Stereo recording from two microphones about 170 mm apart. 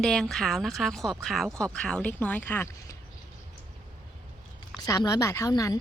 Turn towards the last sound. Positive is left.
turn(degrees=20)  # may be behind; listen again after turning